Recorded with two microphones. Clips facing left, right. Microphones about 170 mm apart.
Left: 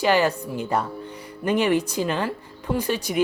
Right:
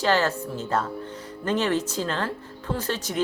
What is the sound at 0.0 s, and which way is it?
Speech, 15° left (ahead or behind).